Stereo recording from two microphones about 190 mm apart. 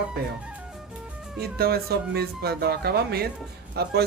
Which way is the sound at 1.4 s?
55° right (ahead or behind).